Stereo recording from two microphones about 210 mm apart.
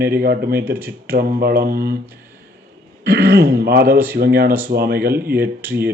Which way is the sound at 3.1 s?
50° right (ahead or behind).